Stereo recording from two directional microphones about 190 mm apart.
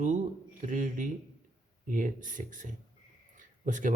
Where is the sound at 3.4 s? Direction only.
40° right (ahead or behind).